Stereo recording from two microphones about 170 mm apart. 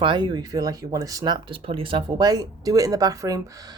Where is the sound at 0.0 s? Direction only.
25° right (ahead or behind).